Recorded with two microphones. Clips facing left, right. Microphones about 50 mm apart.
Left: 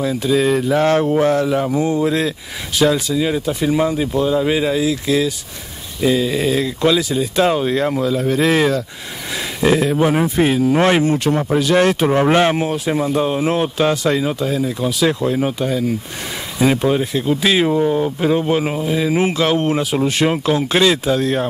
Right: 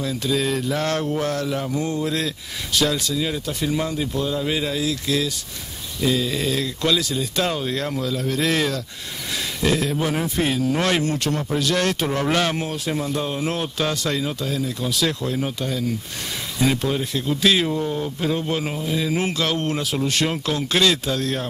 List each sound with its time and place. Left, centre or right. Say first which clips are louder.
0.0 s speech: left 7 dB; centre
12.6 s speech: left 7 dB; centre